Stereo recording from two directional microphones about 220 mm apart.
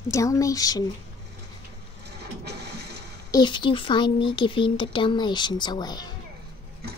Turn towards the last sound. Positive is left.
turn(degrees=20)  # may be behind; listen again after turning